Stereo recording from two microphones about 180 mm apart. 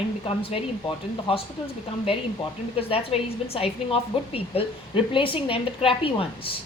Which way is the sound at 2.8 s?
30° left (ahead or behind).